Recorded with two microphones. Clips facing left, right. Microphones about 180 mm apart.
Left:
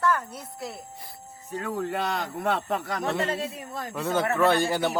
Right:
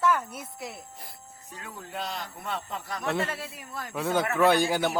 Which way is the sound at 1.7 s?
70° left (ahead or behind).